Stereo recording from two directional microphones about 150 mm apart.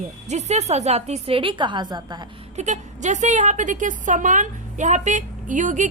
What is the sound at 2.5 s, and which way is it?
A woman's voice, 50° right (ahead or behind).